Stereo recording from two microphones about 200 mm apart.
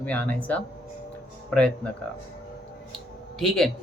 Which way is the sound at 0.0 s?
10° left (ahead or behind).